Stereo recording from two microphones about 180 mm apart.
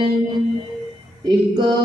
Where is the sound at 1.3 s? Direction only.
25° right (ahead or behind).